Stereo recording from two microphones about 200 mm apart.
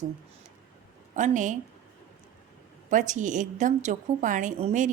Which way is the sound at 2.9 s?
40° right (ahead or behind).